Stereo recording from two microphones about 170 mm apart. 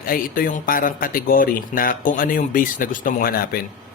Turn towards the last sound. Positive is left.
turn(degrees=60)  # may be behind; listen again after turning